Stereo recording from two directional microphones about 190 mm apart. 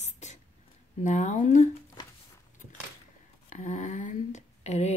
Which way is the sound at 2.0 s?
20° left (ahead or behind).